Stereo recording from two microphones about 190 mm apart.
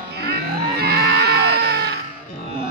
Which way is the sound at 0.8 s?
55° right (ahead or behind).